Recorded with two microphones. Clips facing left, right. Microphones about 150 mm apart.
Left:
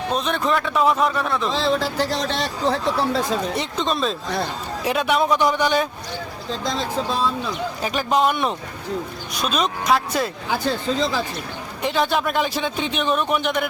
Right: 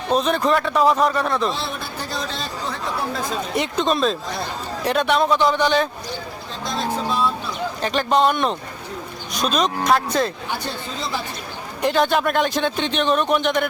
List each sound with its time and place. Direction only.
0.2 s speech: centre (ahead or behind)
1.5 s speech: 90° left
3.5 s a man's voice: centre (ahead or behind)
7.8 s a man's voice: 5° left (ahead or behind)
11.8 s speech: centre (ahead or behind)